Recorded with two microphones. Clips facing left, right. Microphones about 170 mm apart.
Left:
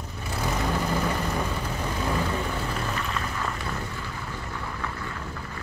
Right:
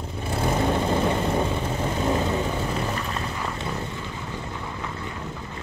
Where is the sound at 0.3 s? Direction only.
25° right (ahead or behind).